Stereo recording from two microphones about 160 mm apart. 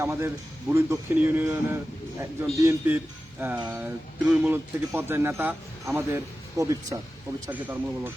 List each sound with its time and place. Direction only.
0.0 s speech: 15° right (ahead or behind)